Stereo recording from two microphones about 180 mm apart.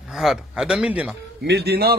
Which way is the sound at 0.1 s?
Centre (ahead or behind).